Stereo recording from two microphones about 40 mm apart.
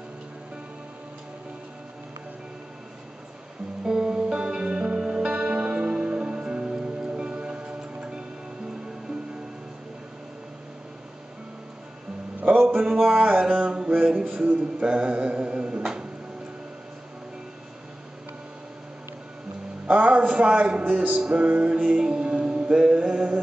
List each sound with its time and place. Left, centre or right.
3.8 s music: centre
12.9 s music: right
13.4 s mantra: right
14.2 s mantra: right
19.9 s a sound: right
20.8 s music: right
21.4 s music: right
21.8 s music: centre
22.9 s mantra: right